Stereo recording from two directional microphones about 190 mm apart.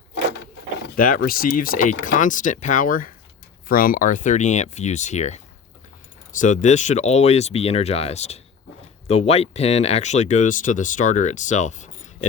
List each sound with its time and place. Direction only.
0.9 s speech: 45° left (ahead or behind)